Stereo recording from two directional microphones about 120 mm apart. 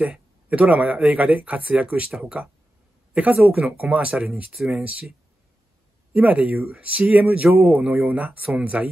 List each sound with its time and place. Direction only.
0.0 s speech: 10° right (ahead or behind)
6.1 s speech: 10° right (ahead or behind)